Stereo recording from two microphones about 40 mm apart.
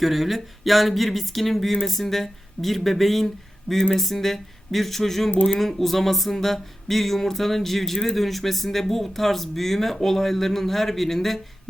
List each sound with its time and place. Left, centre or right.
0.0 s speech: centre